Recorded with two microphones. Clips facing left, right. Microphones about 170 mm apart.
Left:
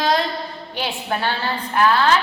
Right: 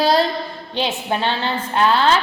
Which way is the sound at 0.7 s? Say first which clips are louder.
Right 3 dB; 20° right (ahead or behind).